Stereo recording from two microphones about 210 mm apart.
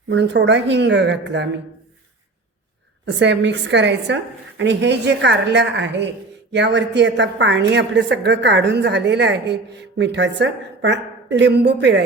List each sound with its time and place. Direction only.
0.1 s a woman's voice: 55° right (ahead or behind)
3.2 s a woman's voice: 55° right (ahead or behind)